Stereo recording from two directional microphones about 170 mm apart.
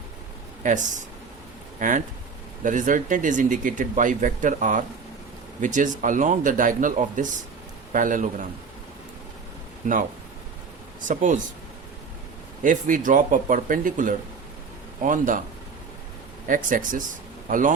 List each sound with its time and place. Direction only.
0.6 s speech: 45° right (ahead or behind)
2.6 s speech: 50° right (ahead or behind)
9.8 s speech: 50° right (ahead or behind)
11.1 s speech: 45° right (ahead or behind)
12.6 s speech: 50° right (ahead or behind)
16.5 s speech: 50° right (ahead or behind)